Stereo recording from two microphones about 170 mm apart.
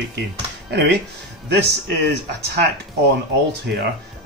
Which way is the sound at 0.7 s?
90° right.